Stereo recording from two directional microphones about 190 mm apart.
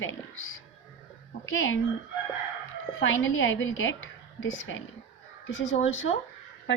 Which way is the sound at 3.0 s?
90° left.